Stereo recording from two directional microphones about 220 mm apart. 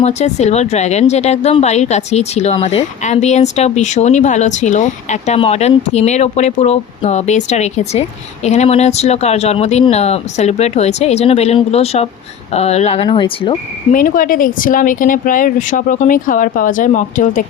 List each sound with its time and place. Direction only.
0.0 s a woman's voice: 30° left (ahead or behind)
13.9 s a woman's voice: 40° left (ahead or behind)